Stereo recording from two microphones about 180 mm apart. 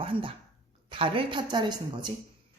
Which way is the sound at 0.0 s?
30° right (ahead or behind).